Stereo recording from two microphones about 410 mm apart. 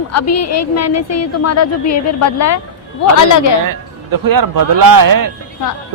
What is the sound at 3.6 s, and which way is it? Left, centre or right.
A man's voice, right.